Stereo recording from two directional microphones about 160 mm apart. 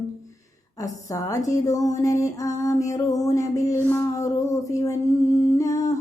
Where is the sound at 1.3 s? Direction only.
20° left (ahead or behind).